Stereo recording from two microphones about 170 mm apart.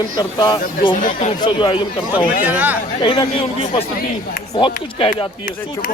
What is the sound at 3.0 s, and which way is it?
Speech, 30° left (ahead or behind).